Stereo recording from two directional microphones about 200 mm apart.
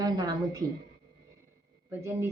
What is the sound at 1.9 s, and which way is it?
Speech, 10° right (ahead or behind).